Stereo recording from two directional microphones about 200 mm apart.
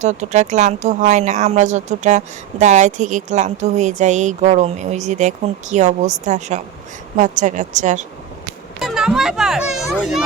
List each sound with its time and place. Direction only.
0.0 s speech: 35° right (ahead or behind)
8.8 s a child's voice: centre (ahead or behind)